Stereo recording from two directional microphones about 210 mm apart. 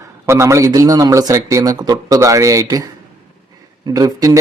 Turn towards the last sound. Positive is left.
turn(degrees=-15)  # may be behind; listen again after turning